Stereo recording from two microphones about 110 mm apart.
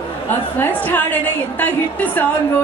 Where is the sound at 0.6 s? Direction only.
20° left (ahead or behind).